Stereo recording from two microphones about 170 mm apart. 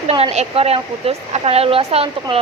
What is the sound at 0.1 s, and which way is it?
Speech, 35° right (ahead or behind).